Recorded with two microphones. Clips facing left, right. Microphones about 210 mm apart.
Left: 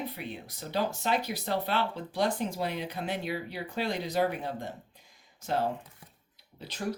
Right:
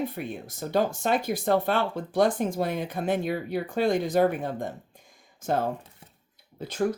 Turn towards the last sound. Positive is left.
turn(degrees=-50)  # may be behind; listen again after turning